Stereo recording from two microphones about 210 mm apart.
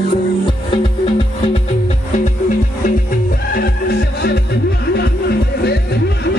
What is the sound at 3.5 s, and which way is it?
Music, 50° left (ahead or behind).